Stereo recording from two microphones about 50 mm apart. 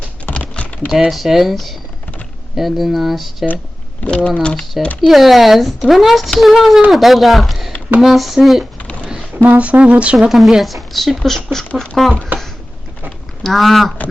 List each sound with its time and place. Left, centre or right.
0.3 s typing: left
0.9 s speech: centre
4.0 s speech: left
5.0 s speech: centre
9.0 s a sound: centre
9.4 s speech: right
10.2 s speech: centre
12.3 s a sound: right
13.1 s a sound: centre